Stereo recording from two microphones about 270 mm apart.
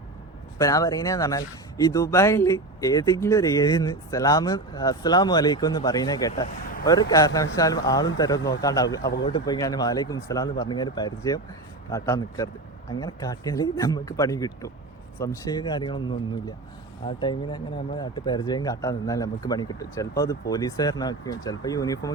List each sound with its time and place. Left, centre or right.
0.6 s speech: centre